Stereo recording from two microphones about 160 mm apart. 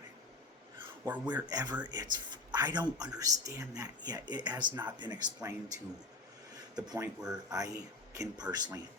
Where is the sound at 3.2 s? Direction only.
20° right (ahead or behind).